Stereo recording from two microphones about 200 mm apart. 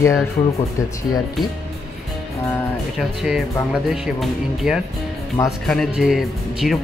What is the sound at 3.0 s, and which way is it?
Speech, centre (ahead or behind).